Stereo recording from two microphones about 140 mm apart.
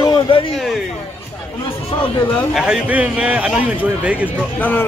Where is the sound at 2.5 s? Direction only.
5° right (ahead or behind).